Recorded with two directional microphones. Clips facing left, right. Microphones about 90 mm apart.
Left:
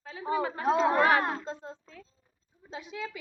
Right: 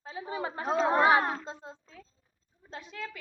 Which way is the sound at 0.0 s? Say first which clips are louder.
Left 5 dB; 25° right (ahead or behind).